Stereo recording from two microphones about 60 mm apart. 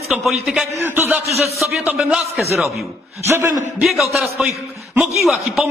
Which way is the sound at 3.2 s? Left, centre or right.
Right.